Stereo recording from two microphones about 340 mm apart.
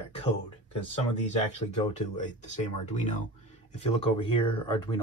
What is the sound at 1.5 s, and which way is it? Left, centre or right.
Speech, left.